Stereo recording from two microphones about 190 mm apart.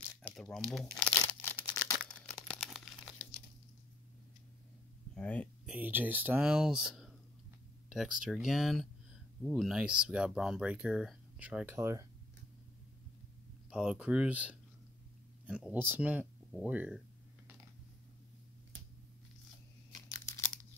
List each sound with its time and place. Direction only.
0.1 s crumpling: 5° left (ahead or behind)
5.1 s speech: 5° left (ahead or behind)
5.7 s speech: 10° right (ahead or behind)
13.7 s speech: 5° right (ahead or behind)
19.9 s a sound: 15° left (ahead or behind)